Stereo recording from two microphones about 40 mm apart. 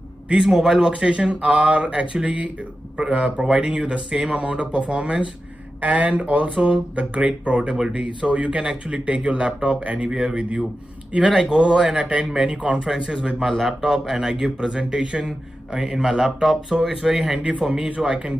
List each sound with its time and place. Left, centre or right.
0.5 s speech: centre
0.7 s speech: right
4.1 s speech: centre
4.4 s speech: right
5.8 s speech: right
12.8 s speech: centre
13.4 s speech: centre
17.6 s speech: right